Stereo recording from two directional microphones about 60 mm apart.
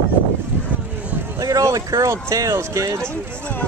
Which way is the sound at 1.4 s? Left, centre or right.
Right.